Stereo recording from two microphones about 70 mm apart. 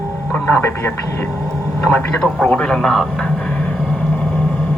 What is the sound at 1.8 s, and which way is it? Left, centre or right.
A child's voice, left.